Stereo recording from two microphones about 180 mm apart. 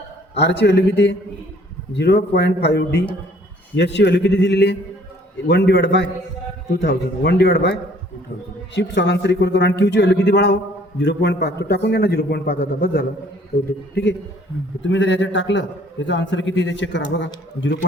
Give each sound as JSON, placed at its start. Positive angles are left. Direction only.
{"t": 0.3, "sound": "speech", "side_deg": 70}
{"t": 8.7, "sound": "speech", "side_deg": 75}
{"t": 14.8, "sound": "a man's voice", "side_deg": 90}